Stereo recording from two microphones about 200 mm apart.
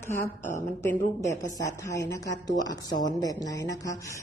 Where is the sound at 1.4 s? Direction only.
15° left (ahead or behind).